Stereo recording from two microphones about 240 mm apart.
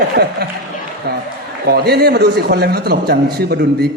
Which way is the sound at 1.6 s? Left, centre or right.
Right.